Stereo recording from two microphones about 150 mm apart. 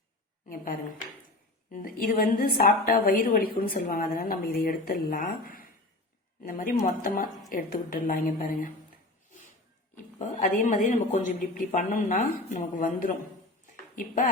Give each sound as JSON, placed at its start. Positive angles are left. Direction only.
{"t": 0.4, "sound": "a woman's voice", "side_deg": 70}
{"t": 10.4, "sound": "a woman's voice", "side_deg": 60}